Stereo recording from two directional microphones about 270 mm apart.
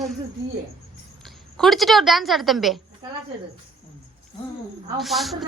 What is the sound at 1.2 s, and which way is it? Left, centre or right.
A woman's voice, centre.